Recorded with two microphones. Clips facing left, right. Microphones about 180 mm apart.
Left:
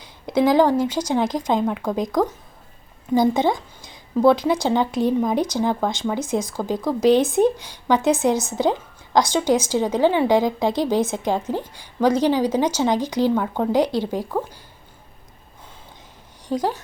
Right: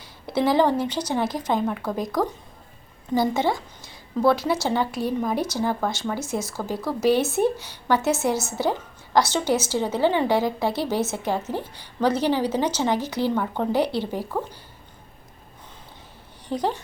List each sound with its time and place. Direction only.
0.0 s a woman's voice: 15° left (ahead or behind)
16.5 s a woman's voice: 10° left (ahead or behind)